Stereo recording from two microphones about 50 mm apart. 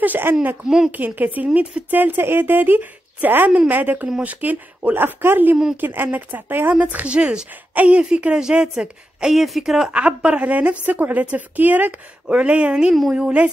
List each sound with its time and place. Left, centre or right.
0.2 s speech: right
0.7 s speech: centre
0.9 s a woman's voice: right
4.9 s a woman's voice: right; by 9.3 s centre
9.3 s speech: centre
9.8 s a woman's voice: right